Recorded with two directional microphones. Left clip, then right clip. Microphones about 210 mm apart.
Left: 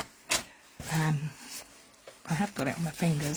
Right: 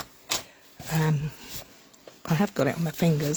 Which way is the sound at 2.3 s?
50° right (ahead or behind).